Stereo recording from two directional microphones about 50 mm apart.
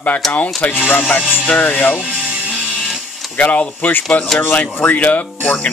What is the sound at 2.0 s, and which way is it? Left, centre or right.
Music, centre.